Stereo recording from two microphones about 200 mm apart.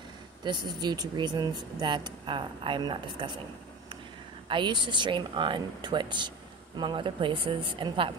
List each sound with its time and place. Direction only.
0.4 s speech: 20° right (ahead or behind)
4.5 s speech: 25° right (ahead or behind)